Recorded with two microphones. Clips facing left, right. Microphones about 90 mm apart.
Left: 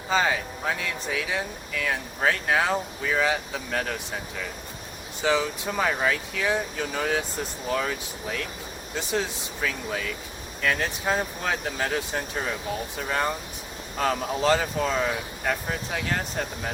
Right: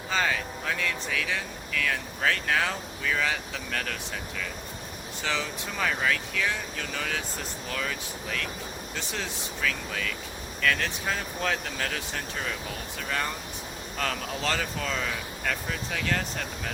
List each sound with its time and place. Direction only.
0.1 s speech: 20° left (ahead or behind)
5.2 s speech: 15° left (ahead or behind)
14.0 s speech: 20° left (ahead or behind)